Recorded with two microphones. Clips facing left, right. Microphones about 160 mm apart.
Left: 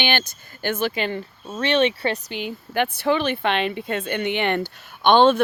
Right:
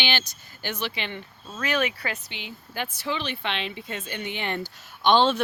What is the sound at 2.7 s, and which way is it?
Speech, 65° left (ahead or behind).